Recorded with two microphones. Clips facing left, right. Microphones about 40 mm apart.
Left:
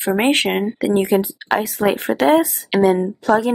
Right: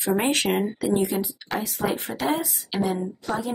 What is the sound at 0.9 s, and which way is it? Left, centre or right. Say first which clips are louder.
A woman's voice: left 9 dB; left.